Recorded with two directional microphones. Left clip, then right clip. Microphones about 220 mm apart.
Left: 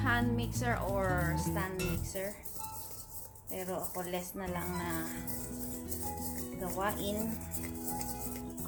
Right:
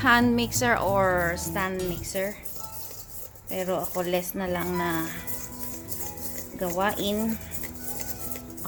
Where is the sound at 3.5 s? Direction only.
45° right (ahead or behind).